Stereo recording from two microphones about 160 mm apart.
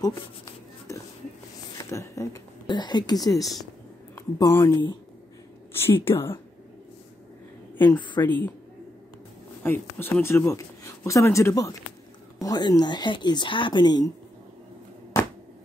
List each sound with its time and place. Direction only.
0.0 s a sound: 20° left (ahead or behind)
1.9 s speech: 20° left (ahead or behind)
4.1 s speech: 15° left (ahead or behind)
7.7 s a sound: 10° left (ahead or behind)
8.2 s speech: 10° left (ahead or behind)
9.6 s speech: 15° left (ahead or behind)